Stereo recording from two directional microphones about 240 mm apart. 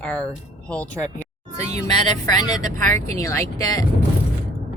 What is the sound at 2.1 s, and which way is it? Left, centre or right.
Speech, centre.